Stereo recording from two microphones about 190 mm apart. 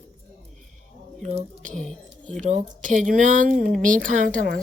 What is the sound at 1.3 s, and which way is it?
Speech, 35° right (ahead or behind).